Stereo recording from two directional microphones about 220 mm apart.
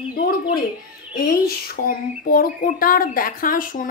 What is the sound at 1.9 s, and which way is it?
A woman's voice, 40° left (ahead or behind).